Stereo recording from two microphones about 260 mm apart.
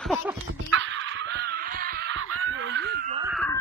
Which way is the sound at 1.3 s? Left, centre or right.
Right.